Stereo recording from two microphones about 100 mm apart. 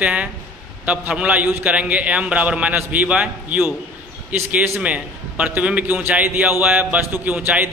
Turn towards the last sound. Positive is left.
turn(degrees=-15)  # may be behind; listen again after turning